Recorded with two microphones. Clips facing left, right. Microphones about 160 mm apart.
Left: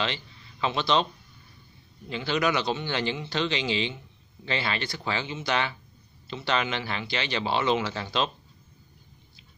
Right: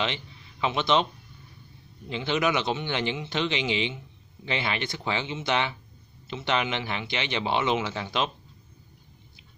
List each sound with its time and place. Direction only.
0.0 s a man's voice: 15° right (ahead or behind)
2.0 s speech: 20° right (ahead or behind)